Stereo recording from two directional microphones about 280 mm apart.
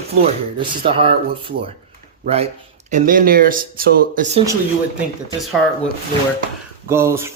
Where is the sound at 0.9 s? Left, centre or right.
Centre.